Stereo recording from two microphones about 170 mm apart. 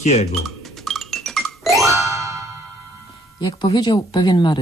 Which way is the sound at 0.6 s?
Centre (ahead or behind).